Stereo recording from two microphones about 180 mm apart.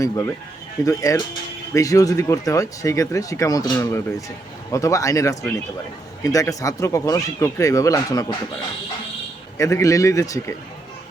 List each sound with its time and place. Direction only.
0.0 s speech: 20° left (ahead or behind)
9.6 s speech: 15° left (ahead or behind)